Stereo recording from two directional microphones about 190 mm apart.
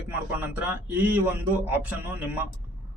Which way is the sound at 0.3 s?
10° right (ahead or behind).